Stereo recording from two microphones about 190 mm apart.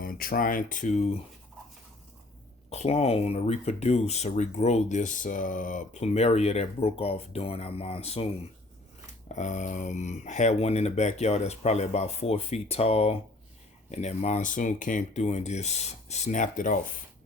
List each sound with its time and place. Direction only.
0.0 s speech: 50° left (ahead or behind)
2.6 s speech: 35° left (ahead or behind)
9.3 s speech: 40° left (ahead or behind)